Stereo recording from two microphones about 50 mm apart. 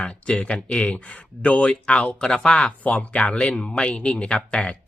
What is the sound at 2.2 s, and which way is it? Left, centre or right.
Speech, centre.